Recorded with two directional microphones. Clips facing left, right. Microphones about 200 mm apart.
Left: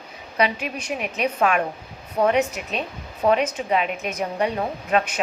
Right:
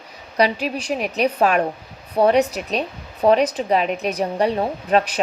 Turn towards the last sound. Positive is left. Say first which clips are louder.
# right 3 dB
turn(degrees=-35)  # may be behind; listen again after turning